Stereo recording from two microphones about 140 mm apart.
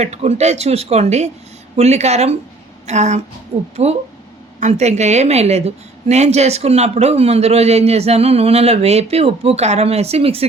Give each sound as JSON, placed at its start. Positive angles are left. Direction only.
{"t": 0.0, "sound": "a woman's voice", "side_deg": -50}
{"t": 3.5, "sound": "a woman's voice", "side_deg": -45}